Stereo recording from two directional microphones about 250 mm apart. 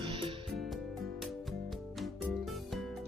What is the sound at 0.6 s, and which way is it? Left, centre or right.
Music, centre.